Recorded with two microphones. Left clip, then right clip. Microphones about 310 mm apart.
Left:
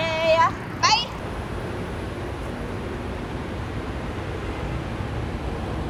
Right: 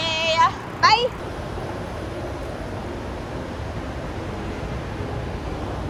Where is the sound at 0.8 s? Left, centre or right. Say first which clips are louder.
Right 4 dB; centre.